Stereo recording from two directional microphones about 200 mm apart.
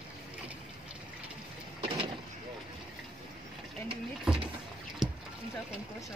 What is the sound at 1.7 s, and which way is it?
Vehicle, 25° right (ahead or behind).